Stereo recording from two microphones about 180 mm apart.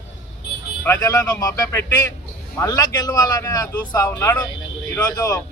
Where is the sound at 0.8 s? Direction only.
20° left (ahead or behind).